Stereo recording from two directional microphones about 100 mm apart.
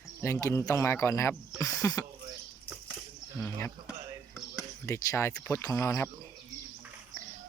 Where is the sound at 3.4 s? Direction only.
30° left (ahead or behind).